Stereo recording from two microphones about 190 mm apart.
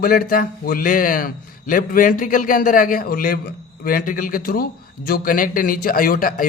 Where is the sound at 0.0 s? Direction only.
50° left (ahead or behind).